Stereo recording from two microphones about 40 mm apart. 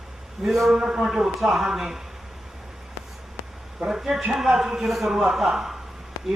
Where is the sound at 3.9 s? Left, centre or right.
Centre.